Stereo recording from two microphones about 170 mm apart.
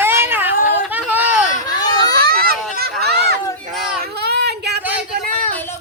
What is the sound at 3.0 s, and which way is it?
Chatter, 75° right (ahead or behind).